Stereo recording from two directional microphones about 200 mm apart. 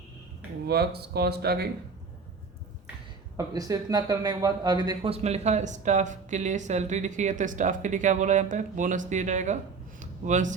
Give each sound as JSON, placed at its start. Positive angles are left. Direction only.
{"t": 0.7, "sound": "speech", "side_deg": -50}
{"t": 3.3, "sound": "speech", "side_deg": -15}
{"t": 10.0, "sound": "a sound", "side_deg": -40}